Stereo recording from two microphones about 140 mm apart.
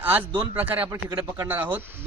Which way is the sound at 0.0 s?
10° right (ahead or behind).